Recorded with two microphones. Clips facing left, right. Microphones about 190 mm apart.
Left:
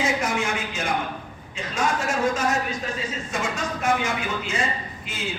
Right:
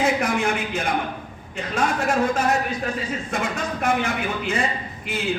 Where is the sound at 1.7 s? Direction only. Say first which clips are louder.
Right 3 dB; 60° right (ahead or behind).